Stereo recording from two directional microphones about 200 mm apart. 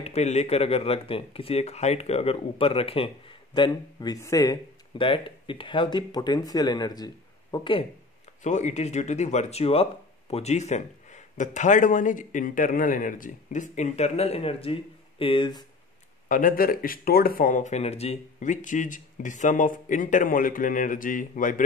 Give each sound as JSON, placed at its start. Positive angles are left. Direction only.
{"t": 0.0, "sound": "speech", "side_deg": 35}
{"t": 8.4, "sound": "speech", "side_deg": 35}
{"t": 16.3, "sound": "speech", "side_deg": 45}